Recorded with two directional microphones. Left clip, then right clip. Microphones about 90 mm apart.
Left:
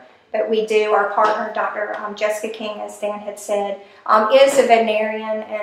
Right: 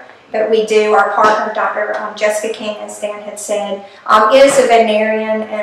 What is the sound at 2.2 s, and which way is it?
A woman's voice, 20° right (ahead or behind).